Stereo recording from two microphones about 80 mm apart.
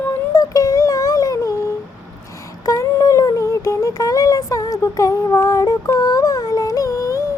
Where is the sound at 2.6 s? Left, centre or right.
Left.